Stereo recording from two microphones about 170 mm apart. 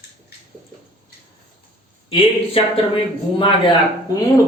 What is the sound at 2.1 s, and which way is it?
A man's voice, 35° left (ahead or behind).